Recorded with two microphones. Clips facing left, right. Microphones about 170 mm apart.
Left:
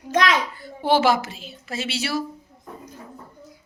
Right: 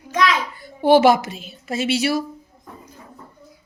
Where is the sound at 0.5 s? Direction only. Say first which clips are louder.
Right 6 dB; 15° right (ahead or behind).